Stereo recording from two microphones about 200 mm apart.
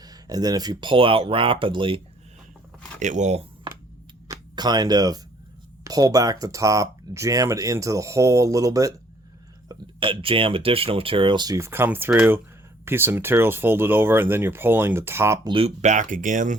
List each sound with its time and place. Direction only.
0.0 s speech: 20° right (ahead or behind)
3.0 s speech: 35° right (ahead or behind)
4.3 s a sound: 20° right (ahead or behind)
5.8 s speech: 20° right (ahead or behind)
15.5 s speech: 35° right (ahead or behind)